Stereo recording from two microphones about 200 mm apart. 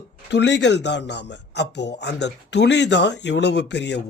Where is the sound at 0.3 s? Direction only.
60° left (ahead or behind).